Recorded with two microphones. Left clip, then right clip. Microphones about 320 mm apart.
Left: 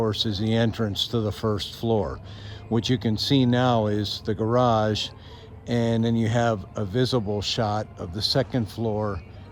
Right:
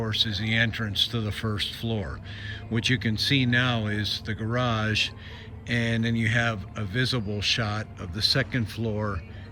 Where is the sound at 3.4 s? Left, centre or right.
Centre.